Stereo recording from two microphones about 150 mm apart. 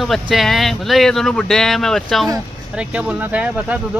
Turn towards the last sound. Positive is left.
turn(degrees=-10)  # may be behind; listen again after turning